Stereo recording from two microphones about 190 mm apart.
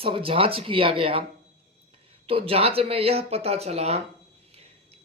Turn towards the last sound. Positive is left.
turn(degrees=-35)  # may be behind; listen again after turning